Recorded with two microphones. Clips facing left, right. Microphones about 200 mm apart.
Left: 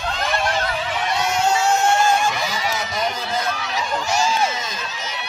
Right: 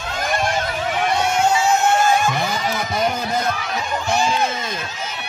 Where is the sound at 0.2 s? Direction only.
50° right (ahead or behind).